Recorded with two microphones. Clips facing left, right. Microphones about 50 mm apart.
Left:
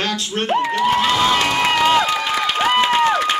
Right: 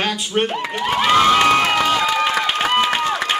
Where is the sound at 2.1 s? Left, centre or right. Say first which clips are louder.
Right 2 dB; centre.